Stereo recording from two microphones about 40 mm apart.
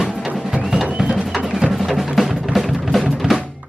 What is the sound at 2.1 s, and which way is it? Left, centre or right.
Music, centre.